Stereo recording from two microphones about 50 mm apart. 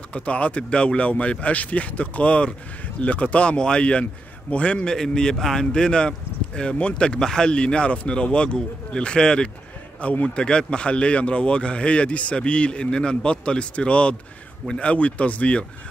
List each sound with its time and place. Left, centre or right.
0.1 s a man's voice: left